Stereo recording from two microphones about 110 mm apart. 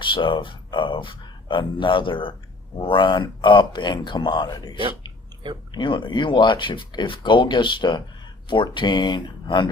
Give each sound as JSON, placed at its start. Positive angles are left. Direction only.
{"t": 0.0, "sound": "speech", "side_deg": 50}
{"t": 5.7, "sound": "speech", "side_deg": 45}